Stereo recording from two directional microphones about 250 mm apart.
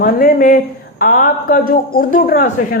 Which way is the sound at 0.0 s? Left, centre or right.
Left.